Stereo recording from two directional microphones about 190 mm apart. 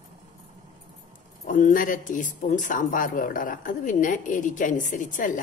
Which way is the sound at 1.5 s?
45° left (ahead or behind).